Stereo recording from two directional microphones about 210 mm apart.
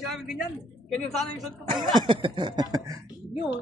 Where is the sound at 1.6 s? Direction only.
25° right (ahead or behind).